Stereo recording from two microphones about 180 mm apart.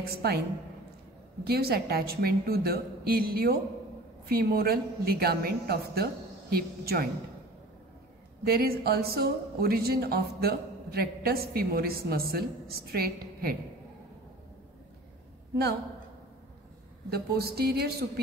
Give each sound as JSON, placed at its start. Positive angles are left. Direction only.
{"t": 0.1, "sound": "speech", "side_deg": -60}
{"t": 1.4, "sound": "speech", "side_deg": -60}
{"t": 8.5, "sound": "speech", "side_deg": -55}
{"t": 17.1, "sound": "speech", "side_deg": -60}